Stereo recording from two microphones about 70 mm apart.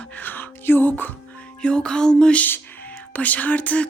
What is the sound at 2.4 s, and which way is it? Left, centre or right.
Speech, left.